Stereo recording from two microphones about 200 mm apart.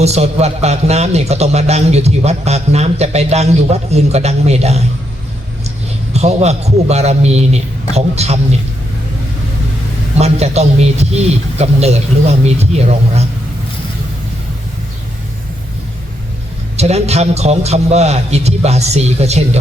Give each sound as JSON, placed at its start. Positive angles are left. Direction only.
{"t": 0.0, "sound": "a man's voice", "side_deg": -30}
{"t": 6.1, "sound": "a man's voice", "side_deg": -35}
{"t": 10.2, "sound": "a man's voice", "side_deg": -30}
{"t": 16.7, "sound": "a man's voice", "side_deg": -30}